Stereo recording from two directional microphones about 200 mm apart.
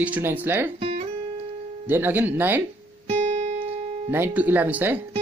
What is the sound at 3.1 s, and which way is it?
Music, 35° right (ahead or behind).